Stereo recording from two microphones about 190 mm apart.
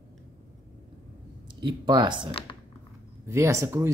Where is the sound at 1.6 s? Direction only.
25° right (ahead or behind).